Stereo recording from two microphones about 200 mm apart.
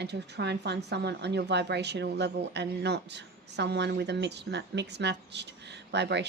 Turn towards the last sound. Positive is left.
turn(degrees=-60)  # may be behind; listen again after turning